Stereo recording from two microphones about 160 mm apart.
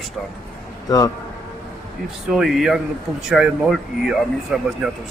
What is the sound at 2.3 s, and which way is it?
Speech, centre (ahead or behind).